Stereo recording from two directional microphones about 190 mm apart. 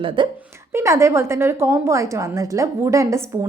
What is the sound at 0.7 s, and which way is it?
A woman's voice, 15° right (ahead or behind).